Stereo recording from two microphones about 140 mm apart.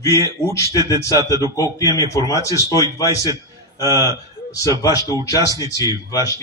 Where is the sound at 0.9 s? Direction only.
25° left (ahead or behind).